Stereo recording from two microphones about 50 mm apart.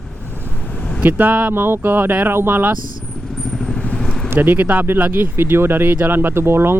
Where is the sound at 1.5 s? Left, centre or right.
Right.